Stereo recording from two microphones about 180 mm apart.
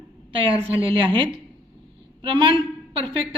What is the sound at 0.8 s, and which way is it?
A woman's voice, 30° right (ahead or behind).